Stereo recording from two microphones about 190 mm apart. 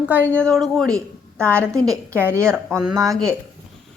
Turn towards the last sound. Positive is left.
turn(degrees=0)  # may be behind; listen again after turning